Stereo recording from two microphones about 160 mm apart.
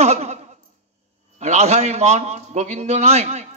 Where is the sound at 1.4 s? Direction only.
45° right (ahead or behind).